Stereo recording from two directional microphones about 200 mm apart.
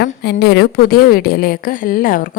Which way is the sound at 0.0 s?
55° left (ahead or behind).